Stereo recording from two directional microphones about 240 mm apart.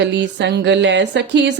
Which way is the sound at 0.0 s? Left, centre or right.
Right.